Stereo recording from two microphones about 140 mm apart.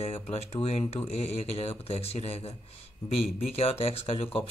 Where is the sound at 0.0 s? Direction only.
45° left (ahead or behind).